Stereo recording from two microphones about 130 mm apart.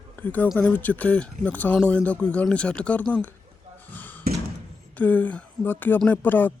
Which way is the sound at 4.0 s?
15° left (ahead or behind).